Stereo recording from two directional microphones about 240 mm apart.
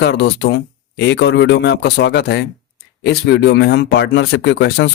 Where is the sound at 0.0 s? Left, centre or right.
Left.